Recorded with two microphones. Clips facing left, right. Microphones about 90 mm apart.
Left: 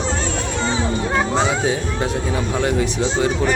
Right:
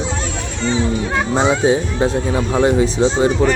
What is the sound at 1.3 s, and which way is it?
Speech, 25° right (ahead or behind).